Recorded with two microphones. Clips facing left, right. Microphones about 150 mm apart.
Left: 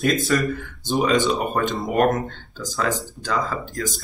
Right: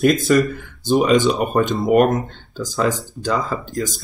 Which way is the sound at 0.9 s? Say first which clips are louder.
Right 5 dB; 15° right (ahead or behind).